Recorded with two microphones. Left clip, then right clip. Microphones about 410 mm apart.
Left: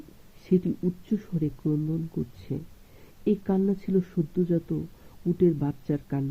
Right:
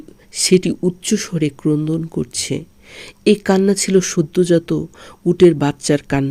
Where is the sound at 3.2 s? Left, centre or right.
Centre.